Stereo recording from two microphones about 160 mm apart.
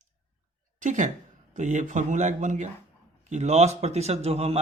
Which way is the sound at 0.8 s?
50° right (ahead or behind).